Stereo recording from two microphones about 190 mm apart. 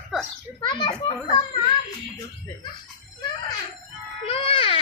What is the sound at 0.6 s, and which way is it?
Children playing, 25° left (ahead or behind).